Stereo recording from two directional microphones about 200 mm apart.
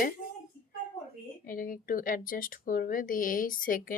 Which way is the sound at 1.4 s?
45° left (ahead or behind).